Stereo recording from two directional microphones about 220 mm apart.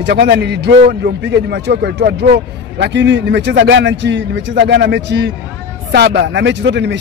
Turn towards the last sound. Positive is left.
turn(degrees=-50)  # may be behind; listen again after turning